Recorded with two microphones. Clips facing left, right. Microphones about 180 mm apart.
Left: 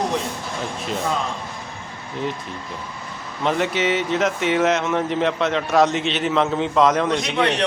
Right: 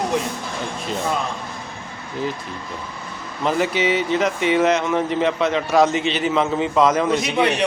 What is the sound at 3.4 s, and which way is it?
Speech, centre (ahead or behind).